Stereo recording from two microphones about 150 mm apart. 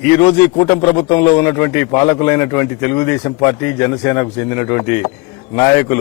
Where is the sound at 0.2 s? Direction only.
10° left (ahead or behind).